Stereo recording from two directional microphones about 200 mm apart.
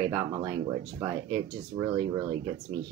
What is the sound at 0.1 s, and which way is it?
Speech, 15° right (ahead or behind).